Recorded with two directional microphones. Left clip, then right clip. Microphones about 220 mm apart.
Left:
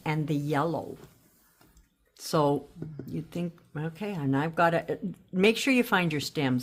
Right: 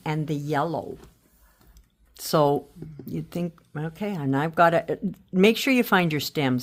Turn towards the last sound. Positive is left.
turn(degrees=-30)  # may be behind; listen again after turning